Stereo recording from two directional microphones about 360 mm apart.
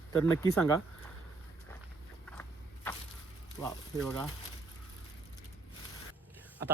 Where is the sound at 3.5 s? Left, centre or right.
Centre.